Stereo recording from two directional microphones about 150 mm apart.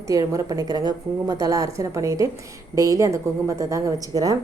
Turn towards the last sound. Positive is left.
turn(degrees=-25)  # may be behind; listen again after turning